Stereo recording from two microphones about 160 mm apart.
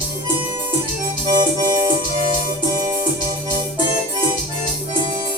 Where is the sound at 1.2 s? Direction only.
25° right (ahead or behind).